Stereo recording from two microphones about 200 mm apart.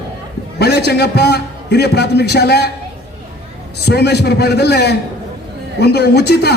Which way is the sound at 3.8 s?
55° left (ahead or behind).